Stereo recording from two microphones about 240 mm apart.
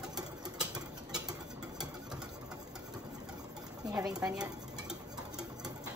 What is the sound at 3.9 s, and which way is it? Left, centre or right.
Speech, centre.